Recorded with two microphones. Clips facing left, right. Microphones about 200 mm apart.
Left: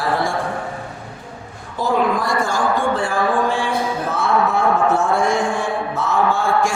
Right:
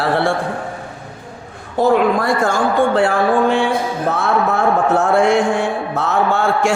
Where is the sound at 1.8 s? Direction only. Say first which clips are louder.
Right 5 dB; 60° right (ahead or behind).